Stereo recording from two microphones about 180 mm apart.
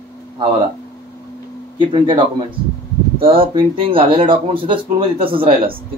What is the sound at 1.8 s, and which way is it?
Speech, 25° right (ahead or behind).